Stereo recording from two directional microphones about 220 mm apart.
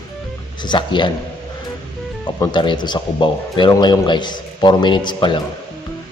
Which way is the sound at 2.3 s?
20° left (ahead or behind).